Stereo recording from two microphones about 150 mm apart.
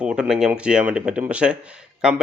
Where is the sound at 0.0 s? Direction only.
5° right (ahead or behind).